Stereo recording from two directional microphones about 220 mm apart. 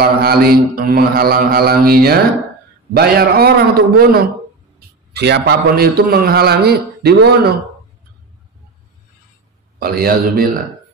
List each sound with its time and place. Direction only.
0.0 s a man's voice: 45° right (ahead or behind)
9.8 s a man's voice: 45° right (ahead or behind)